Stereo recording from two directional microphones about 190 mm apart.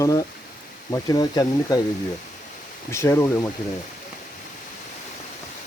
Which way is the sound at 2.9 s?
15° left (ahead or behind).